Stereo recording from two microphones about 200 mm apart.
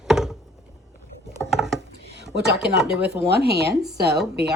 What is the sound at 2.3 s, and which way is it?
Speech, 60° right (ahead or behind).